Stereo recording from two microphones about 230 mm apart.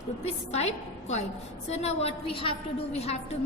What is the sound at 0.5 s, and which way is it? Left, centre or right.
A woman's voice, left.